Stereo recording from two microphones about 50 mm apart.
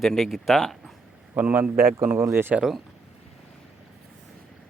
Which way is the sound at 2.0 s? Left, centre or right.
Right.